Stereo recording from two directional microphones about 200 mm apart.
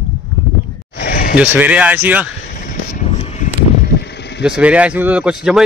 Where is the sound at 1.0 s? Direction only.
50° left (ahead or behind).